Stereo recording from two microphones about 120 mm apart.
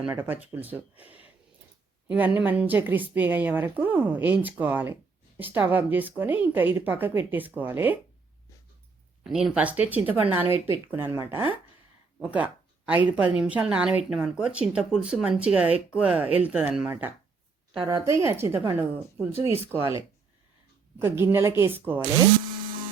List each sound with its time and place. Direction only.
0.0 s speech: 15° right (ahead or behind)
9.2 s a woman's voice: 5° right (ahead or behind); by 11.4 s 20° right (ahead or behind)
12.2 s a sound: 10° right (ahead or behind)
13.4 s speech: 10° right (ahead or behind)
17.8 s a woman's voice: 30° right (ahead or behind)
21.0 s a woman's voice: 20° right (ahead or behind)